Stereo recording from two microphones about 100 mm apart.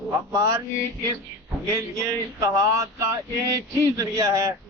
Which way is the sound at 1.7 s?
30° right (ahead or behind).